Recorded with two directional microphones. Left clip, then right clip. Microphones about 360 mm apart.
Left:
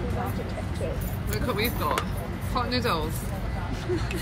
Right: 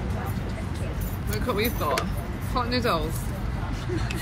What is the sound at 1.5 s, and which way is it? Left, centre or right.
Speech, centre.